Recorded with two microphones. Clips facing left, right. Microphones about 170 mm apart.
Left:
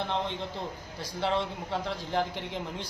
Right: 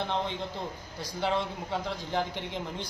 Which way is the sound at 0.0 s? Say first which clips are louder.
Even; centre (ahead or behind).